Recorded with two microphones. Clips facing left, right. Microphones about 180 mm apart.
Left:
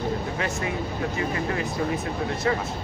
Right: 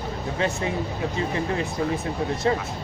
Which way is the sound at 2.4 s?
30° right (ahead or behind).